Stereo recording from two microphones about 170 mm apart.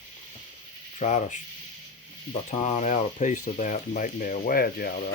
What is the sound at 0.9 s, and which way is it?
Speech, 45° left (ahead or behind).